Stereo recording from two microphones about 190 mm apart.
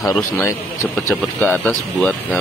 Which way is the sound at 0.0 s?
15° left (ahead or behind).